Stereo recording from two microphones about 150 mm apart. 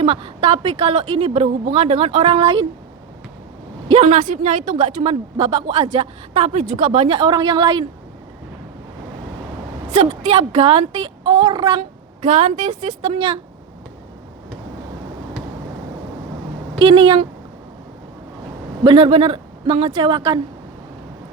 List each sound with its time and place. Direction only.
0.0 s speech: 35° right (ahead or behind)
3.8 s speech: 45° right (ahead or behind)
4.2 s a woman's voice: 60° right (ahead or behind)
5.4 s speech: 35° right (ahead or behind)
6.7 s a woman's voice: 60° right (ahead or behind)
6.9 s speech: 40° right (ahead or behind)
9.9 s speech: 45° right (ahead or behind); by 11.8 s 30° right (ahead or behind)
11.8 s speech: 50° right (ahead or behind)
16.7 s speech: 35° right (ahead or behind)
18.8 s speech: 35° right (ahead or behind)